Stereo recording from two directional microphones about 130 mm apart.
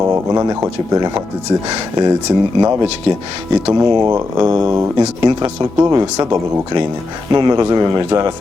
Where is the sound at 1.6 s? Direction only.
30° right (ahead or behind).